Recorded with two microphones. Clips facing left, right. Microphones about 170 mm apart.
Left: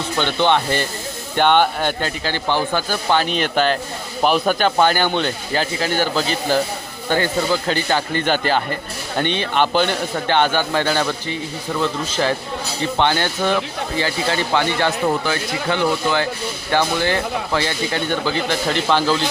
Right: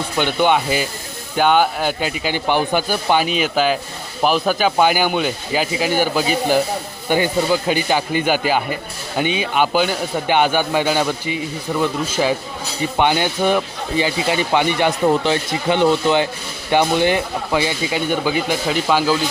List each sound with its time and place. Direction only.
0.2 s speech: 10° right (ahead or behind)